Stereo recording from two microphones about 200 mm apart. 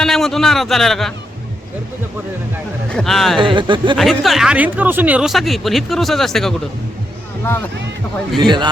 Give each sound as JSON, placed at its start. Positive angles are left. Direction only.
{"t": 0.0, "sound": "speech", "side_deg": 0}
{"t": 2.9, "sound": "speech", "side_deg": 0}
{"t": 3.4, "sound": "speech", "side_deg": -25}
{"t": 3.9, "sound": "speech", "side_deg": 0}
{"t": 8.4, "sound": "speech", "side_deg": -25}